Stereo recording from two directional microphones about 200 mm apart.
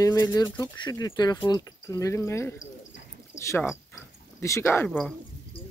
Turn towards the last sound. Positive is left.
turn(degrees=5)  # may be behind; listen again after turning